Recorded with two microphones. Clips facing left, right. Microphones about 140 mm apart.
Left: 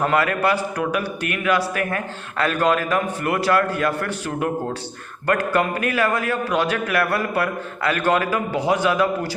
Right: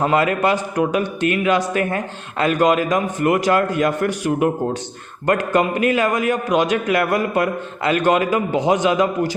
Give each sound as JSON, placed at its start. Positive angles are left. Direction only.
{"t": 0.0, "sound": "a man's voice", "side_deg": -20}